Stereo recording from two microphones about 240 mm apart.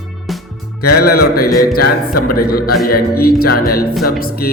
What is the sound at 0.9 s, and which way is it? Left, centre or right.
Music, left.